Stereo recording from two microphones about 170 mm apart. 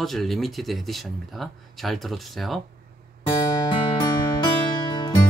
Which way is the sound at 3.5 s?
25° left (ahead or behind).